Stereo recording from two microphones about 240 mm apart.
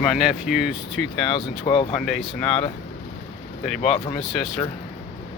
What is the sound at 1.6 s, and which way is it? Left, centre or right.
Speech, left.